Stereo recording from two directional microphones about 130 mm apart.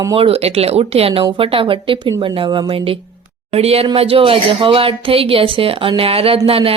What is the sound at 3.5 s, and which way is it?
Speech, 50° right (ahead or behind).